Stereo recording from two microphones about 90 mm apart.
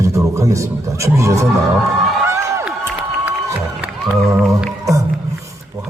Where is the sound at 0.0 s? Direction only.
35° right (ahead or behind).